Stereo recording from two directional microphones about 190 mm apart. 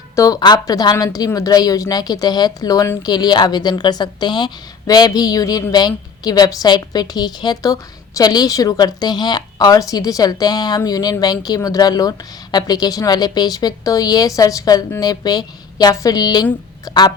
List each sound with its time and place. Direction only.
0.2 s a woman's voice: 20° left (ahead or behind)